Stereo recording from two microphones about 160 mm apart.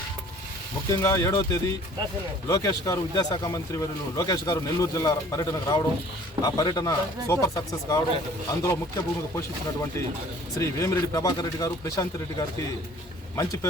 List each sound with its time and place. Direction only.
0.9 s speech: 20° left (ahead or behind)
10.6 s speech: 20° left (ahead or behind)